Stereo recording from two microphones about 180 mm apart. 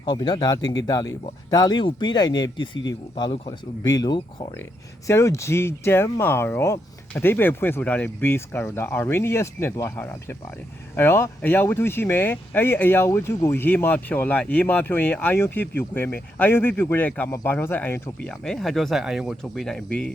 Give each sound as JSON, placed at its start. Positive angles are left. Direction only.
{"t": 0.0, "sound": "speech", "side_deg": 25}
{"t": 0.6, "sound": "speech", "side_deg": 90}
{"t": 0.9, "sound": "speech", "side_deg": 20}